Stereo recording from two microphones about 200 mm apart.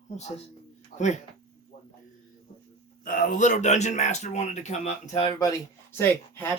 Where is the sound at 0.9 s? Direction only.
35° left (ahead or behind).